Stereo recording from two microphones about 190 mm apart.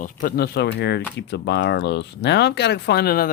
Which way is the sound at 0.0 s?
45° left (ahead or behind).